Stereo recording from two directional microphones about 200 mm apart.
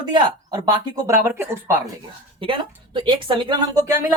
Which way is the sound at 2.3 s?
25° right (ahead or behind).